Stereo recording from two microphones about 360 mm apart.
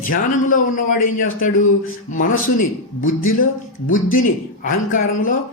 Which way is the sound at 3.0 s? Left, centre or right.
Left.